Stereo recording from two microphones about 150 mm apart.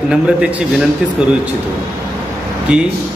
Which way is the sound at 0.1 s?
5° right (ahead or behind).